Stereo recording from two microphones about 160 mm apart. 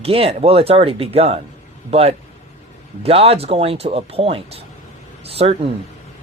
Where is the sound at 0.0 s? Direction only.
35° right (ahead or behind).